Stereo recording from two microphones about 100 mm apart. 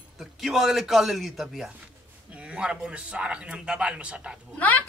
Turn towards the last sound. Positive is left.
turn(degrees=15)  # may be behind; listen again after turning